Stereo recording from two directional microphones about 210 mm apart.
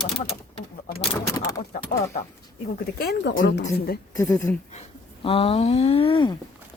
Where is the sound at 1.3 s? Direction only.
15° left (ahead or behind).